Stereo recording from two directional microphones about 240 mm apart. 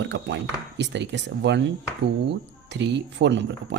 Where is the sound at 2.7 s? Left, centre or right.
Right.